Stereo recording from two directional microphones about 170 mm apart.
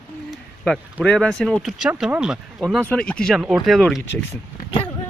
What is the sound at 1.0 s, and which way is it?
Speech, 5° left (ahead or behind).